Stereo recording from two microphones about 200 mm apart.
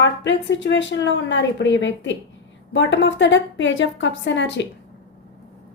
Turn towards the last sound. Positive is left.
turn(degrees=60)  # may be behind; listen again after turning